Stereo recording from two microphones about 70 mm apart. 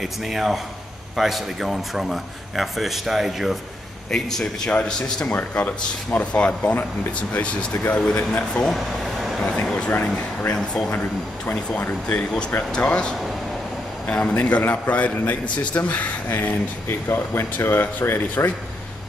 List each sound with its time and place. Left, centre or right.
0.0 s a man's voice: centre
5.3 s speech: centre
8.6 s air conditioning: centre
9.8 s speech: left
10.5 s speech: centre
17.1 s speech: left